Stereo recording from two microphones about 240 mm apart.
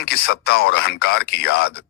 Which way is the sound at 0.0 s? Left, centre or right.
Left.